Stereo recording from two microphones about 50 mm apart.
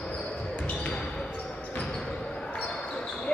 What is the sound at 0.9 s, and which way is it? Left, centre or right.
Basketball bounce, centre.